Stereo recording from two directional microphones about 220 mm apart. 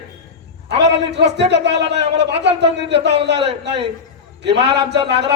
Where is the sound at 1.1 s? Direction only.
50° right (ahead or behind).